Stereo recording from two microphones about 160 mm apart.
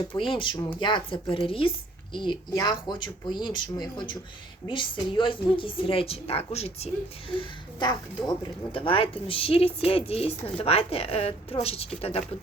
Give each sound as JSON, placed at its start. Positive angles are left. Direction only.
{"t": 0.2, "sound": "speech", "side_deg": 30}
{"t": 7.3, "sound": "speech", "side_deg": 25}